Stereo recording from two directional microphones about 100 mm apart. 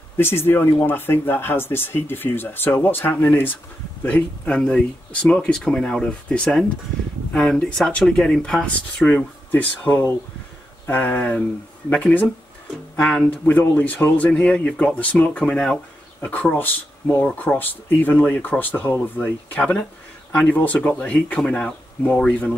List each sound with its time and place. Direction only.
0.2 s speech: 20° left (ahead or behind)